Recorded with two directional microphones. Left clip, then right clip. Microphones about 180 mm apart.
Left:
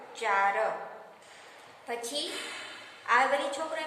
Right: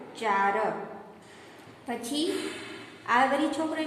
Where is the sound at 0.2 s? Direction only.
15° right (ahead or behind).